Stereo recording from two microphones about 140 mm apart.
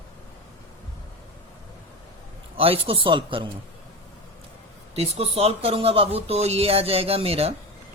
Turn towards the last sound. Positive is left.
turn(degrees=-45)  # may be behind; listen again after turning